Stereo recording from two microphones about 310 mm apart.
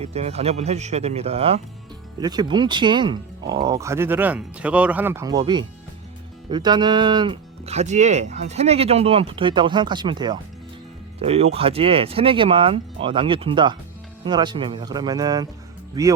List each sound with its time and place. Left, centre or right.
0.0 s speech: centre